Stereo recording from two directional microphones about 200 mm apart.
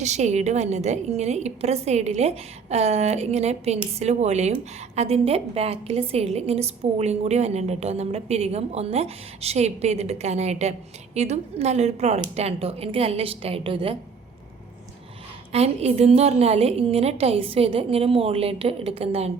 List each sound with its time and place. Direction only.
0.0 s a woman's voice: 35° right (ahead or behind)
15.5 s a woman's voice: 30° right (ahead or behind)